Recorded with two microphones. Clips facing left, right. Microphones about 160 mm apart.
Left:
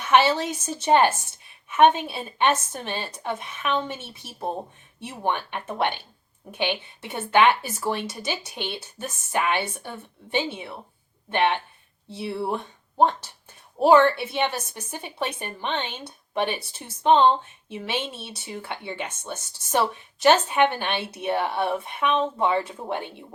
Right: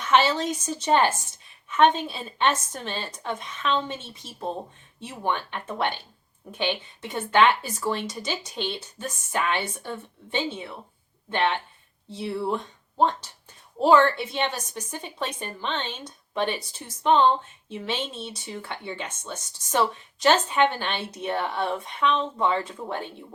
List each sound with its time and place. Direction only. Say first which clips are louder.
0.0 s speech: left 2 dB; 15° left (ahead or behind)